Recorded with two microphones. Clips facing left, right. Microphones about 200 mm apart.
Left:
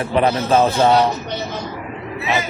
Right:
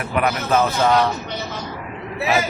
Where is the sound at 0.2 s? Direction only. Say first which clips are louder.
Left 3 dB; 30° left (ahead or behind).